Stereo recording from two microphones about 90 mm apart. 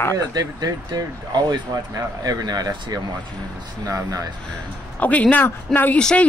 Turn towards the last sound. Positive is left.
turn(degrees=15)  # may be behind; listen again after turning